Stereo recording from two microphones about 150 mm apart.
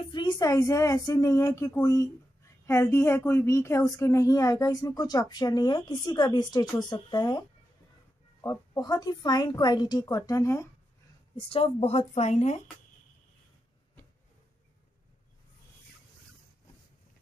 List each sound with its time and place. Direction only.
0.0 s a woman's voice: 30° left (ahead or behind)
11.3 s speech: 40° left (ahead or behind)